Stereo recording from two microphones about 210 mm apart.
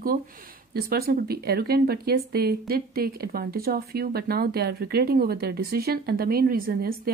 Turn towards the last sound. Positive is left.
turn(degrees=-45)  # may be behind; listen again after turning